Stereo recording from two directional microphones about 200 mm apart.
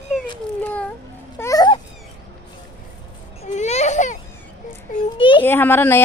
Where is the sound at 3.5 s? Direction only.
35° left (ahead or behind).